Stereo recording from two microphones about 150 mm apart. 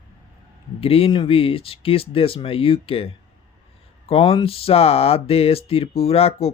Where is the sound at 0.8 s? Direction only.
40° left (ahead or behind).